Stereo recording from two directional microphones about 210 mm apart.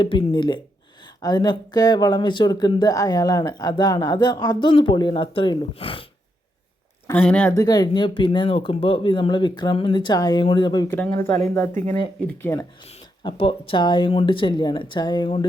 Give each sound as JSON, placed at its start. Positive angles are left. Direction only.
{"t": 0.0, "sound": "speech", "side_deg": 20}
{"t": 7.1, "sound": "speech", "side_deg": 5}
{"t": 12.9, "sound": "speech", "side_deg": 25}